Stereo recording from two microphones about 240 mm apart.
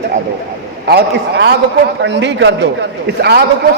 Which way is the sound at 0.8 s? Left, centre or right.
Right.